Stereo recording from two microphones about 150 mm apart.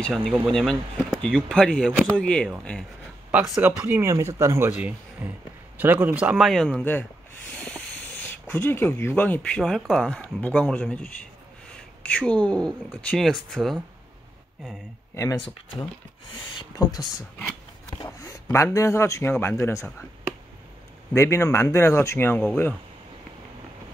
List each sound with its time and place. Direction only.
0.0 s speech: centre (ahead or behind)
3.3 s speech: 10° right (ahead or behind)
6.8 s speech: 15° left (ahead or behind)
15.4 s a man's voice: 35° left (ahead or behind); by 20.1 s 20° left (ahead or behind)
21.1 s a man's voice: 15° left (ahead or behind)